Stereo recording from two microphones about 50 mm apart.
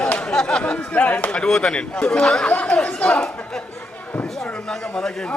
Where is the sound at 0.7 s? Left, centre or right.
Centre.